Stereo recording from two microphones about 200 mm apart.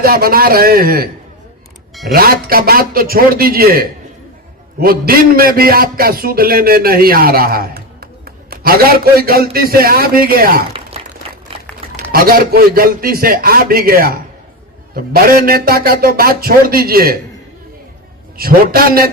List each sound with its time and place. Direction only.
0.0 s a man's voice: 45° right (ahead or behind)
2.1 s a man's voice: 50° right (ahead or behind)
12.1 s a man's voice: 45° right (ahead or behind)
18.3 s a man's voice: 50° right (ahead or behind)